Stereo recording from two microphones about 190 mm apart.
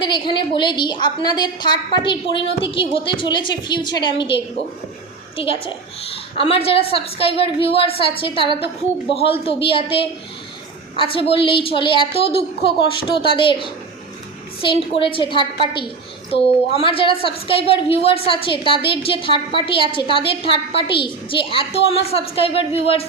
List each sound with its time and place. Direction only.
0.0 s a woman's voice: 25° left (ahead or behind)
5.4 s a woman's voice: 30° left (ahead or behind)